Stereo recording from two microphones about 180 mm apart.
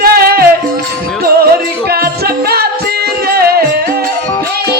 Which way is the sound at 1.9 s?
60° right (ahead or behind).